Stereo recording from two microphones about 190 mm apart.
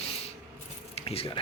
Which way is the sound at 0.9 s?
30° left (ahead or behind).